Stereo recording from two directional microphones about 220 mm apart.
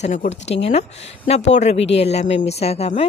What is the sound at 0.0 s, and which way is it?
A woman's voice, 35° left (ahead or behind).